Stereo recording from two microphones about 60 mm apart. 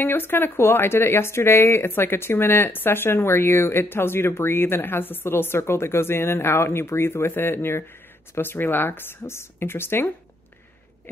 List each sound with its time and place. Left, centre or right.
0.0 s speech: left